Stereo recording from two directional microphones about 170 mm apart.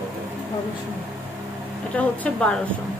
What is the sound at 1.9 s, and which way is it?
Speech, 10° left (ahead or behind).